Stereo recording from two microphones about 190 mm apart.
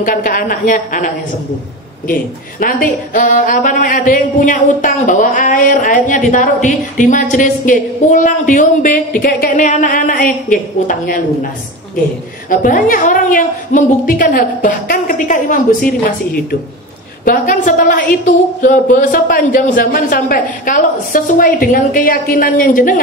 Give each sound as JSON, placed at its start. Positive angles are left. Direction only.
{"t": 0.0, "sound": "speech", "side_deg": 45}
{"t": 2.6, "sound": "speech", "side_deg": 45}
{"t": 12.4, "sound": "speech", "side_deg": 45}
{"t": 17.2, "sound": "speech", "side_deg": 45}